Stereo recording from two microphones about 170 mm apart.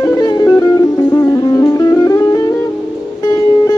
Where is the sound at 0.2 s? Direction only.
20° left (ahead or behind).